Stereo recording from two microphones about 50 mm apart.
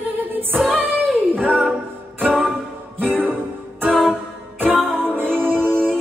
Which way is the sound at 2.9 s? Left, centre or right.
Right.